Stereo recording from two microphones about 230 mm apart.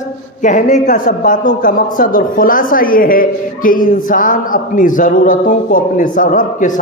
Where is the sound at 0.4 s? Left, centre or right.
Left.